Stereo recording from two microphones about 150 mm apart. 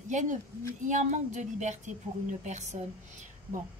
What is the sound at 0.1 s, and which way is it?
Speech, 55° right (ahead or behind).